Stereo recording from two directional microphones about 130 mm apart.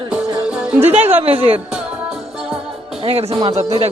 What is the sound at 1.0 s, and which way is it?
Speech, 15° right (ahead or behind).